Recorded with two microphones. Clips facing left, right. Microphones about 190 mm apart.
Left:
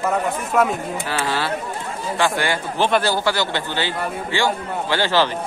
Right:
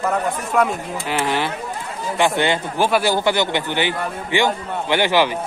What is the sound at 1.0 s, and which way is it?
A man's voice, 15° right (ahead or behind).